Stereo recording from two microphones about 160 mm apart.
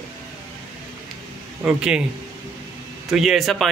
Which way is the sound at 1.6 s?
5° right (ahead or behind).